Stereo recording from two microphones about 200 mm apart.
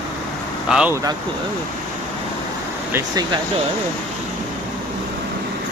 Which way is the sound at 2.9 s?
20° right (ahead or behind).